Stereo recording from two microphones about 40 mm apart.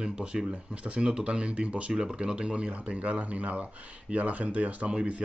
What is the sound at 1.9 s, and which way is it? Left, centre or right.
Speech, centre.